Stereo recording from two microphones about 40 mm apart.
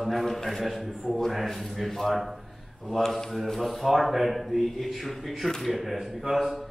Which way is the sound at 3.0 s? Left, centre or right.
Centre.